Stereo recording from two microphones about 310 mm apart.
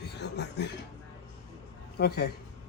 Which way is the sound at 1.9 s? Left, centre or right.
Left.